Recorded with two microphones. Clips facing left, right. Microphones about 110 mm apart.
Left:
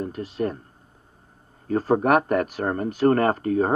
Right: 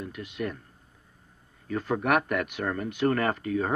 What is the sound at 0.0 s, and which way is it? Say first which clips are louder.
Speech: left 7 dB; 35° left (ahead or behind).